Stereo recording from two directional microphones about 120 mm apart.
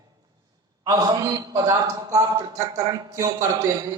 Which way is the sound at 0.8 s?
30° right (ahead or behind).